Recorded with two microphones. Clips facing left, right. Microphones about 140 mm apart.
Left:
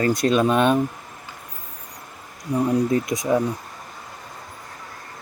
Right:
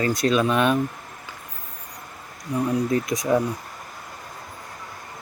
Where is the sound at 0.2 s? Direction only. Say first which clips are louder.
Even; 40° left (ahead or behind).